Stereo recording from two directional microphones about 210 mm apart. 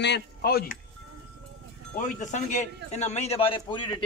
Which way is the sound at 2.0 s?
35° left (ahead or behind).